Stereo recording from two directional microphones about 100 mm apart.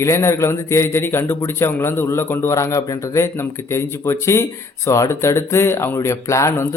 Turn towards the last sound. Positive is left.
turn(degrees=30)  # may be behind; listen again after turning